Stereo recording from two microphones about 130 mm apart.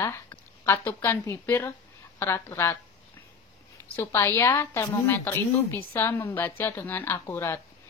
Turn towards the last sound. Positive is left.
turn(degrees=20)  # may be behind; listen again after turning